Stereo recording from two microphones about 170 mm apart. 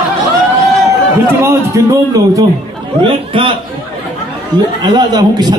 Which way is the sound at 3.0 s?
30° right (ahead or behind).